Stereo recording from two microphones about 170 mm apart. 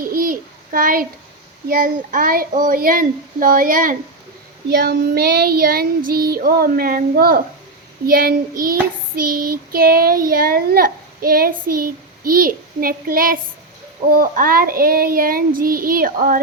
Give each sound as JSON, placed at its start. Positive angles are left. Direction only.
{"t": 0.0, "sound": "child singing", "side_deg": -55}
{"t": 4.7, "sound": "child singing", "side_deg": -70}